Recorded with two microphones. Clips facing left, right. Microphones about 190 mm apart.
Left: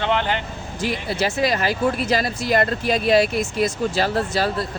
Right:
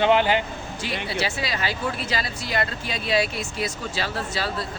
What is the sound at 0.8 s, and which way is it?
Speech, 45° left (ahead or behind).